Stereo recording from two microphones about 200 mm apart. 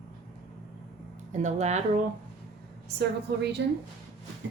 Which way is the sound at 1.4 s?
35° right (ahead or behind).